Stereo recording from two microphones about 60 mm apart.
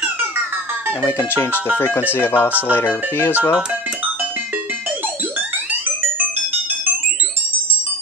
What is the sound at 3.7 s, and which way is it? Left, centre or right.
Music, right.